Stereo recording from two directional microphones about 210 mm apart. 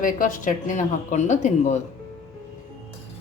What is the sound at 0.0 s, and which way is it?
Speech, 40° left (ahead or behind).